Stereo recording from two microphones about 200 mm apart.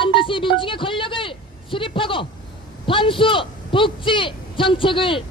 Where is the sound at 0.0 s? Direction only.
25° left (ahead or behind).